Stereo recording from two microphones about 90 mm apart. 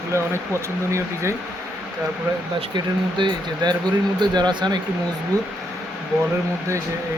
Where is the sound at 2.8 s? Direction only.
60° right (ahead or behind).